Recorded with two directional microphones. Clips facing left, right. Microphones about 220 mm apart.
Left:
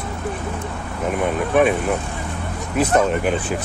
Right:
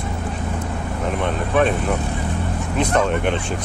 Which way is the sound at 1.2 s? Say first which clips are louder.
Left 2 dB; 10° left (ahead or behind).